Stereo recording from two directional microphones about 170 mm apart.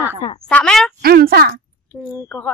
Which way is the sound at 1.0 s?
65° right (ahead or behind).